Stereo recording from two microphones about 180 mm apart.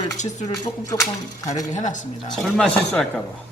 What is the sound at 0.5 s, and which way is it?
Speech, 20° left (ahead or behind).